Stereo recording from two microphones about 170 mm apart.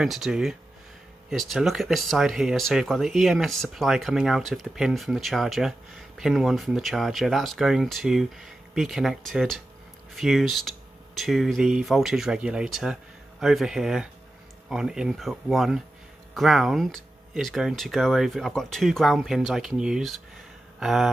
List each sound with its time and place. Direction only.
0.0 s speech: centre (ahead or behind)